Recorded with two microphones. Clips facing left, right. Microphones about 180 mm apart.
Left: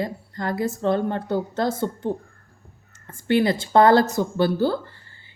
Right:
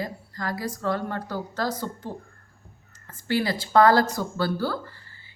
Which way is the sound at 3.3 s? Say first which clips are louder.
Left 4 dB; 25° left (ahead or behind).